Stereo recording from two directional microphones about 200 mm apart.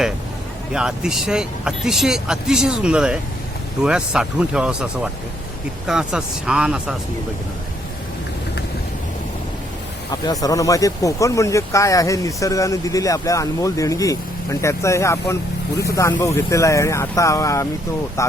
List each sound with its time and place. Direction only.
0.7 s speech: 5° right (ahead or behind)
10.1 s speech: 20° left (ahead or behind)